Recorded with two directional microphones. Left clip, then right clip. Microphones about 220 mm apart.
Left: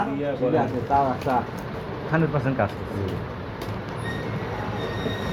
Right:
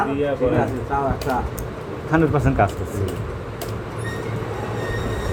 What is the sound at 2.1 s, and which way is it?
Speech, 55° right (ahead or behind).